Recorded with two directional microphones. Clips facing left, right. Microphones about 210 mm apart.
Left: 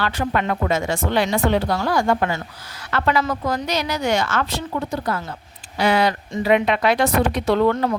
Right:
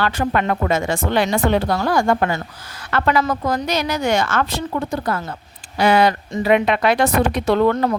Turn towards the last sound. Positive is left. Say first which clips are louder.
# right 2 dB
turn(degrees=-50)  # may be behind; listen again after turning